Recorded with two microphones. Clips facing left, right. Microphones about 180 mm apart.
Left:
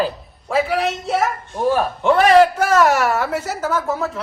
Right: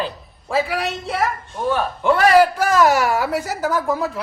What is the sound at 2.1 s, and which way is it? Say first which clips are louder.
A man's voice: left 2 dB; centre (ahead or behind).